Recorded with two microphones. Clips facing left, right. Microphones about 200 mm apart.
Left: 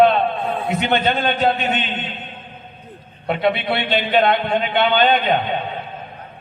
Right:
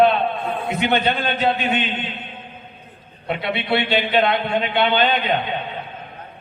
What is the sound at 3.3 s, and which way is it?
A man's voice, 50° left (ahead or behind).